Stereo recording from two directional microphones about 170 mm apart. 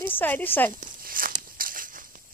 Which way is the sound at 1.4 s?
55° right (ahead or behind).